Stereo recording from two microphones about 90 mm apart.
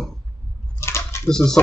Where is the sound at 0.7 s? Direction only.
30° left (ahead or behind).